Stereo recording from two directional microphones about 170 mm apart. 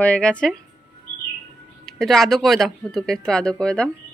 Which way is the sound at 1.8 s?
Centre (ahead or behind).